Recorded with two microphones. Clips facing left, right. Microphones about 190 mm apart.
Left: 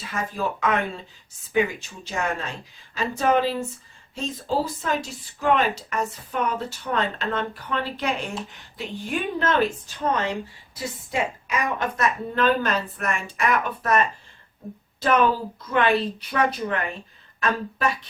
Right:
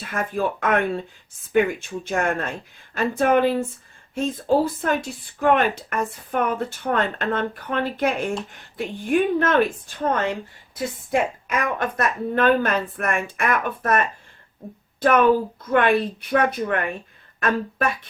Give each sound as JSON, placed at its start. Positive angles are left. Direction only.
{"t": 0.1, "sound": "speech", "side_deg": -55}
{"t": 15.0, "sound": "speech", "side_deg": -55}